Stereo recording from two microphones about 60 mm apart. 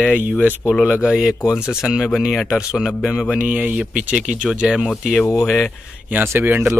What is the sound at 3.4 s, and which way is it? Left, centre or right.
Speech, right.